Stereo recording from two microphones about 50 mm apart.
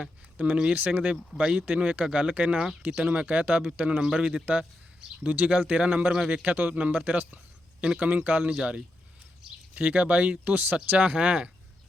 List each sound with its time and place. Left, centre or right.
0.3 s speech: right
1.6 s speech: right
7.8 s speech: centre
8.0 s speech: right